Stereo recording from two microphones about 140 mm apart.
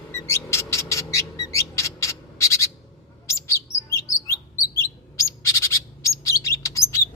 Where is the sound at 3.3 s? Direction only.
20° left (ahead or behind).